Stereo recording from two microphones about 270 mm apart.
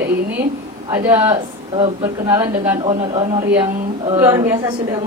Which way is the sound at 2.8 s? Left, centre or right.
Centre.